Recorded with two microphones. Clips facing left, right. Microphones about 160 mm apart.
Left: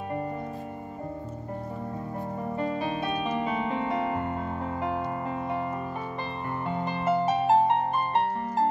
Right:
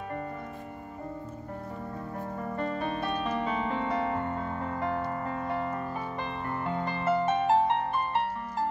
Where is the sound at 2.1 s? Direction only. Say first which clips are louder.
Left 2 dB; 15° left (ahead or behind).